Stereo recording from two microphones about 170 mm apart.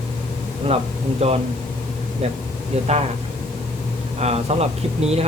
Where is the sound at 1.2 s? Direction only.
40° right (ahead or behind).